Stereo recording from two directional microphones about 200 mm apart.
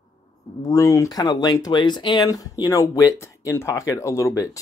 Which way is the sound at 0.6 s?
15° left (ahead or behind).